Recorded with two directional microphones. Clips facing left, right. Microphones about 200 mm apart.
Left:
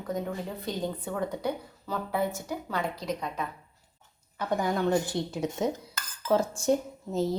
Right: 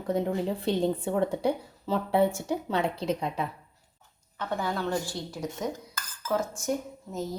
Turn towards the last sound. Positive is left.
turn(degrees=30)  # may be behind; listen again after turning